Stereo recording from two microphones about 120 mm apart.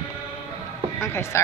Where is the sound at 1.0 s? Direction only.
20° left (ahead or behind).